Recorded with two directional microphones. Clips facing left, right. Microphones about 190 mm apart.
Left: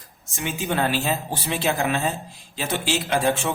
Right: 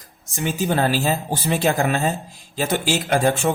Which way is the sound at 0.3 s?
35° right (ahead or behind).